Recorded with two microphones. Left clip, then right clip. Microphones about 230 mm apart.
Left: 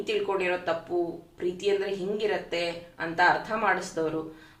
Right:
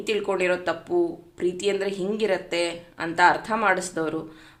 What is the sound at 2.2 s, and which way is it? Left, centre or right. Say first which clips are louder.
Speech: right 6 dB; right.